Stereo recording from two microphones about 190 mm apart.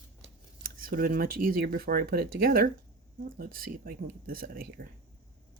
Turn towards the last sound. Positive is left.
turn(degrees=-50)  # may be behind; listen again after turning